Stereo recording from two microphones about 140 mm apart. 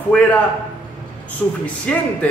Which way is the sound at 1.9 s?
10° left (ahead or behind).